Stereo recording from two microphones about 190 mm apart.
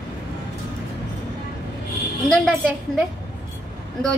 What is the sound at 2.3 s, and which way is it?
Speech, 5° left (ahead or behind).